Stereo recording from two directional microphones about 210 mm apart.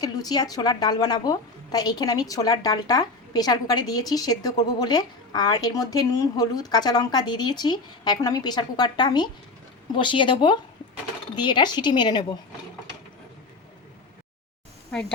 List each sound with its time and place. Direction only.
0.0 s a woman's voice: 20° left (ahead or behind)